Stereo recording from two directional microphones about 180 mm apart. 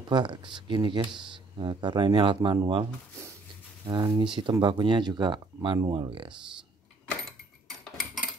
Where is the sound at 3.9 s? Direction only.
20° right (ahead or behind).